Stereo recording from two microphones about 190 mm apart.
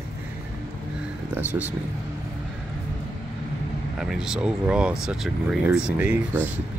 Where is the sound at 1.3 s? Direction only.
10° right (ahead or behind).